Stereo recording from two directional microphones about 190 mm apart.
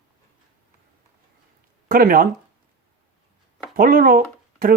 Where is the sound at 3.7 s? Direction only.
50° right (ahead or behind).